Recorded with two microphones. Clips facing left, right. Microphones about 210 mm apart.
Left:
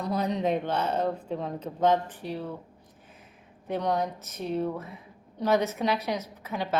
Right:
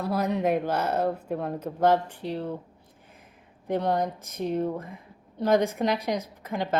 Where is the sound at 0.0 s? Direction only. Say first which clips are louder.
Right 2 dB; 5° right (ahead or behind).